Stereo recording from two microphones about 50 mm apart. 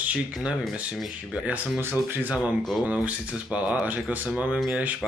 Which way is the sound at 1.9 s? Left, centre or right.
Right.